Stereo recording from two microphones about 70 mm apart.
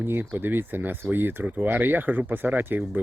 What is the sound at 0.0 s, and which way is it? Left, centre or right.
Speech, right.